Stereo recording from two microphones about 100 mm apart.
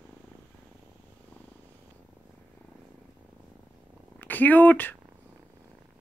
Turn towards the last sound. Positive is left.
turn(degrees=20)  # may be behind; listen again after turning